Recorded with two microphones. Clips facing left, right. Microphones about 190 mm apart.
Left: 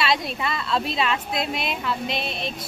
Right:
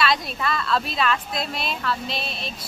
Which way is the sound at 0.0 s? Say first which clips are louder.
Even; 25° left (ahead or behind).